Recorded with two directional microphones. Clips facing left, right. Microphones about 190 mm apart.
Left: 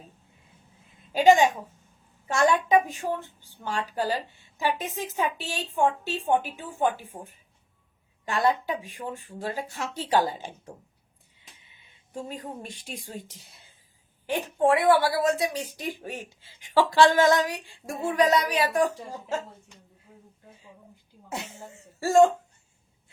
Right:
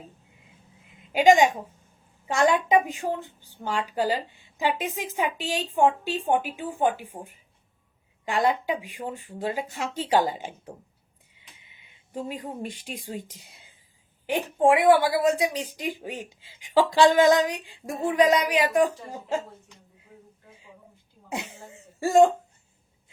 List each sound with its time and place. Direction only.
1.1 s a woman's voice: 15° right (ahead or behind)
11.3 s a sound: 15° right (ahead or behind)
13.5 s whispering: 15° right (ahead or behind)
14.3 s a woman's voice: 15° right (ahead or behind)
21.2 s a woman's voice: 15° right (ahead or behind)